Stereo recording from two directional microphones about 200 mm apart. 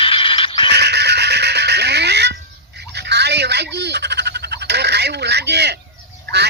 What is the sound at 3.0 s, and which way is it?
Frog, 55° right (ahead or behind).